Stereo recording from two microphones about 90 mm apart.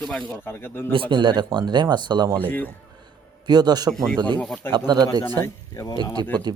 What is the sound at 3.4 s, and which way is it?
Speech, 50° right (ahead or behind).